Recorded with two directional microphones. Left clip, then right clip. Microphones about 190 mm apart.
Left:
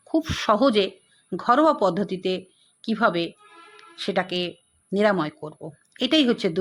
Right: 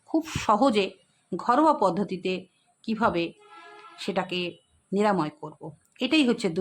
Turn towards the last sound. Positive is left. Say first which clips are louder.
# left 3 dB
turn(degrees=5)  # may be behind; listen again after turning